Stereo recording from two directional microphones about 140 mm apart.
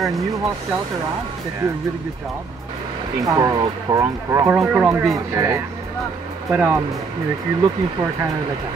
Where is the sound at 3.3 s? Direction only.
25° right (ahead or behind).